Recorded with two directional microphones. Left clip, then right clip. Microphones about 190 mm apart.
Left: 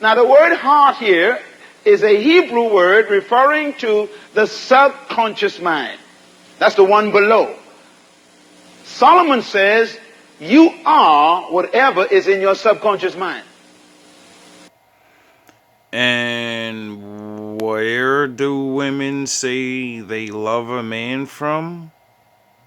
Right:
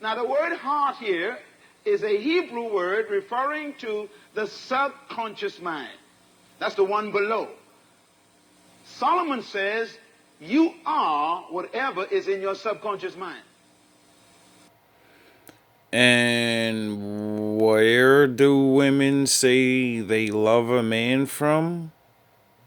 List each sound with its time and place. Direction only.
0.0 s speech: 50° left (ahead or behind)
8.8 s speech: 50° left (ahead or behind)
15.9 s speech: 20° right (ahead or behind)